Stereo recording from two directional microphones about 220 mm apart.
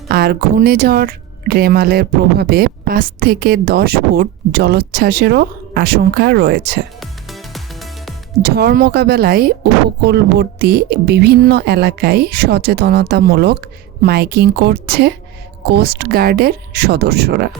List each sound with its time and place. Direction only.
0.1 s speech: 45° right (ahead or behind)
7.0 s music: centre (ahead or behind)
8.4 s speech: 45° right (ahead or behind)